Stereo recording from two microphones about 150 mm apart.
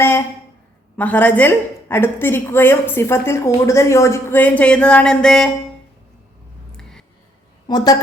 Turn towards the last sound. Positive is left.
turn(degrees=25)  # may be behind; listen again after turning